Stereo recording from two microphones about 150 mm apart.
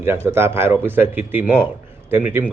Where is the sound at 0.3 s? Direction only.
15° right (ahead or behind).